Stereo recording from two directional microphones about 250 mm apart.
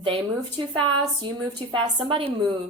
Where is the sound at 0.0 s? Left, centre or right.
Centre.